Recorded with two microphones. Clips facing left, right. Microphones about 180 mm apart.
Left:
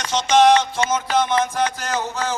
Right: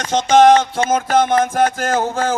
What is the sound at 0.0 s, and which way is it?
A man's voice, 50° right (ahead or behind).